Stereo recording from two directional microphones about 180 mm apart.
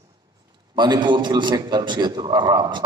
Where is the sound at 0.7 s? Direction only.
25° right (ahead or behind).